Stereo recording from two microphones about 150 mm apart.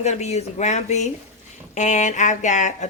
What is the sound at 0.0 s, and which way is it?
A woman's voice, 50° left (ahead or behind).